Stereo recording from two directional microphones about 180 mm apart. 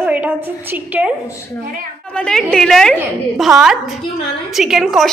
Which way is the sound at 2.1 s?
5° left (ahead or behind).